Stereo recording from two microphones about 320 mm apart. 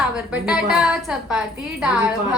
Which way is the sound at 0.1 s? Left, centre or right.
Centre.